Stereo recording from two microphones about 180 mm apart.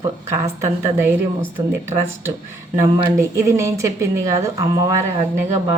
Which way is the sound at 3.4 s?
15° right (ahead or behind).